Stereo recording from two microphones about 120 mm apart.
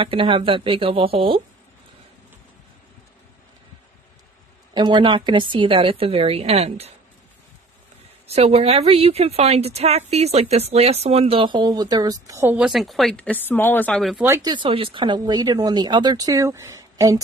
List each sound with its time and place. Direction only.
0.0 s a woman's voice: 45° right (ahead or behind)
4.7 s a woman's voice: 40° right (ahead or behind); by 6.9 s 55° right (ahead or behind)
8.3 s speech: 60° right (ahead or behind); by 12.5 s 25° right (ahead or behind)
12.5 s speech: centre (ahead or behind)
13.2 s speech: 15° left (ahead or behind)
14.1 s speech: 20° right (ahead or behind)
14.4 s a woman's voice: 40° right (ahead or behind)
15.1 s speech: 35° right (ahead or behind)